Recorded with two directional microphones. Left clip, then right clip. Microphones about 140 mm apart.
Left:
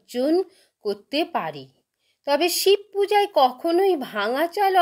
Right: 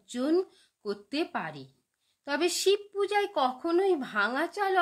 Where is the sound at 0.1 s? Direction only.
20° left (ahead or behind).